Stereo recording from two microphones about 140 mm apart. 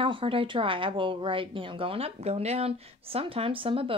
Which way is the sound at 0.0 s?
40° right (ahead or behind).